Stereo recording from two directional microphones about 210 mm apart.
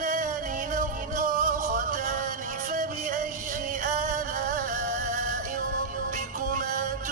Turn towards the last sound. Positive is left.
turn(degrees=-40)  # may be behind; listen again after turning